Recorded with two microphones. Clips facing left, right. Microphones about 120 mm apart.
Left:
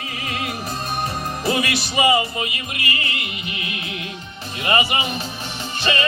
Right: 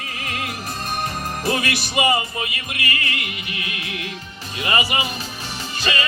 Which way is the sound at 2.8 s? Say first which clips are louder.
Right 1 dB; 25° left (ahead or behind).